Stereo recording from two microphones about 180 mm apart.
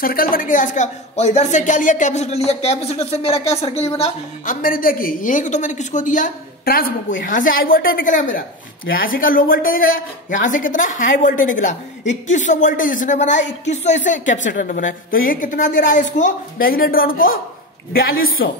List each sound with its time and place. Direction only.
0.0 s a woman's voice: 55° left (ahead or behind); by 4.6 s 35° left (ahead or behind)
4.6 s a woman's voice: 50° left (ahead or behind)